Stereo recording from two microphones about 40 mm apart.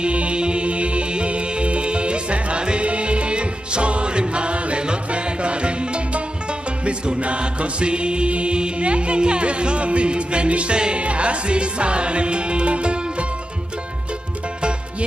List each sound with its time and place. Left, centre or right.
0.0 s music: right